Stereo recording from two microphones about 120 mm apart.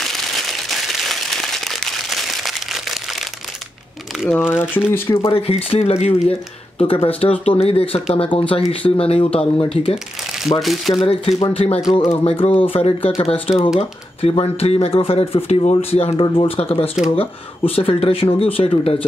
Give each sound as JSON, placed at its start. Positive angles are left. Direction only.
{"t": 0.0, "sound": "crumpling", "side_deg": 0}
{"t": 4.3, "sound": "speech", "side_deg": 15}
{"t": 5.3, "sound": "speech", "side_deg": 50}
{"t": 6.8, "sound": "speech", "side_deg": 50}
{"t": 10.6, "sound": "speech", "side_deg": 0}
{"t": 11.0, "sound": "speech", "side_deg": 55}